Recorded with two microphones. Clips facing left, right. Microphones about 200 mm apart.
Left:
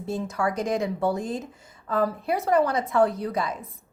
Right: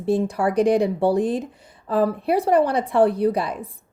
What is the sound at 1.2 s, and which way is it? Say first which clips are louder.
Speech: right 8 dB; 65° right (ahead or behind).